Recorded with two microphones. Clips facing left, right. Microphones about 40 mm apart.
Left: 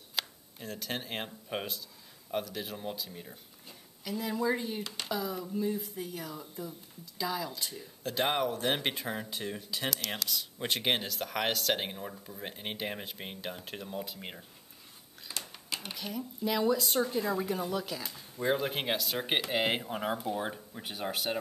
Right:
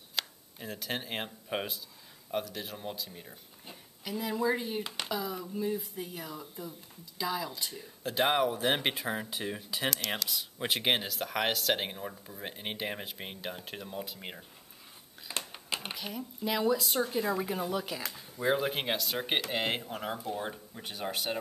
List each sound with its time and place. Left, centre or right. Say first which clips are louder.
0.1 s speech: even; centre
15.3 s a sound: right 3 dB; right
15.9 s speech: left 1 dB; centre